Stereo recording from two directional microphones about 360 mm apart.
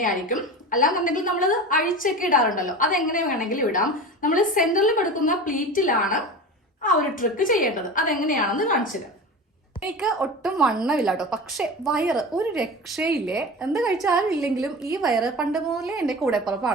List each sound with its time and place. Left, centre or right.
0.0 s a woman's voice: left
9.8 s a woman's voice: centre